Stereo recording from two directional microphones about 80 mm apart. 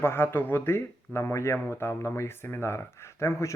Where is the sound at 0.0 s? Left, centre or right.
Left.